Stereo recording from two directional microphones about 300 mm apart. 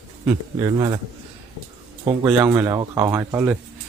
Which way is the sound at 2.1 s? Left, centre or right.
Centre.